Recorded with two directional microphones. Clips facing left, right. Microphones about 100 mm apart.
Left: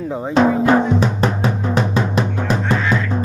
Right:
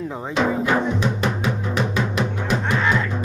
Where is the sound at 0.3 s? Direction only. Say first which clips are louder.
Left 6 dB; 35° left (ahead or behind).